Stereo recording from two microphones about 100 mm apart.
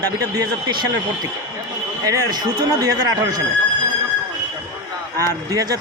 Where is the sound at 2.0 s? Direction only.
40° right (ahead or behind).